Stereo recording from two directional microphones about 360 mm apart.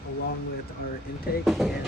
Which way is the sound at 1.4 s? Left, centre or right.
Centre.